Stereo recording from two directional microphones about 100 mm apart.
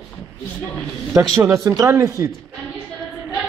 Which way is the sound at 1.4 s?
30° right (ahead or behind).